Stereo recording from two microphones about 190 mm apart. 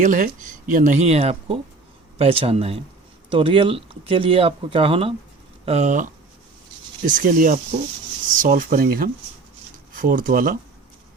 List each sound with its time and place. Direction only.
0.0 s speech: 40° right (ahead or behind)